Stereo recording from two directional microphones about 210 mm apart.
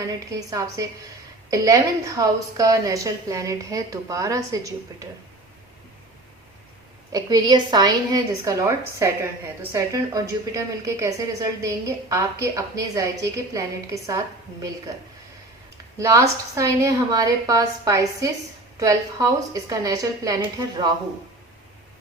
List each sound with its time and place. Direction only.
0.0 s a woman's voice: 15° right (ahead or behind)
7.1 s a woman's voice: 20° right (ahead or behind)
16.0 s a woman's voice: 15° right (ahead or behind)